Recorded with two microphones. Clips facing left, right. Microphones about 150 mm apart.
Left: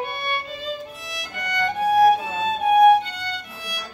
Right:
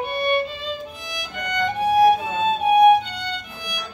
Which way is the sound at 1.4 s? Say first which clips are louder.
Right 1 dB; centre (ahead or behind).